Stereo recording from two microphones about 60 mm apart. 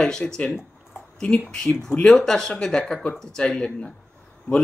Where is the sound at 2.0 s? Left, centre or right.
Centre.